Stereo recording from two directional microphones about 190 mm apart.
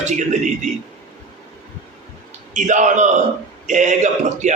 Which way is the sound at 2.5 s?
40° right (ahead or behind).